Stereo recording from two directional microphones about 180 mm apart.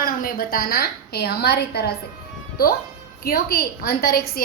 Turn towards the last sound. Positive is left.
turn(degrees=55)  # may be behind; listen again after turning